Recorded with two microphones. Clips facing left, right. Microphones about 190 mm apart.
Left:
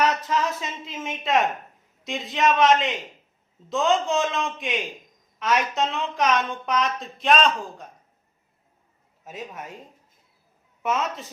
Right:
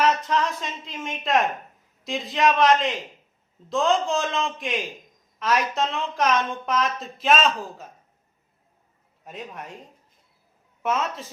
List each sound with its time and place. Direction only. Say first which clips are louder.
0.0 s a woman's voice: right 1 dB; centre (ahead or behind)
9.2 s a woman's voice: left 1 dB; centre (ahead or behind)
10.8 s a woman's voice: even; centre (ahead or behind)